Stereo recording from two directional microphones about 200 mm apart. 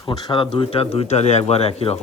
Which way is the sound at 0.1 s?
25° left (ahead or behind).